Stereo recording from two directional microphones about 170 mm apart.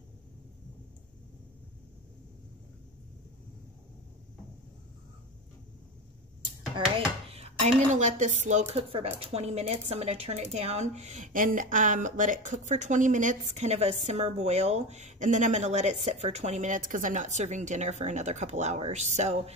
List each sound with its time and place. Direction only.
7.3 s speech: 40° right (ahead or behind)